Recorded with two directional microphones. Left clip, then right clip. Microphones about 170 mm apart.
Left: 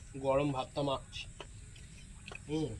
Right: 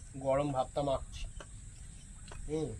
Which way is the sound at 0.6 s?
40° right (ahead or behind).